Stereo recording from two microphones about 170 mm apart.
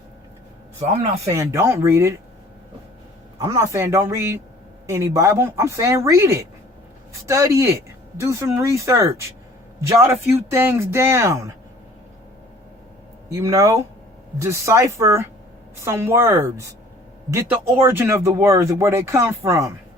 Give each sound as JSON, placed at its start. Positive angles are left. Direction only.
{"t": 0.8, "sound": "a man's voice", "side_deg": -40}
{"t": 1.3, "sound": "speech", "side_deg": -15}
{"t": 3.3, "sound": "speech", "side_deg": -20}
{"t": 13.3, "sound": "speech", "side_deg": -20}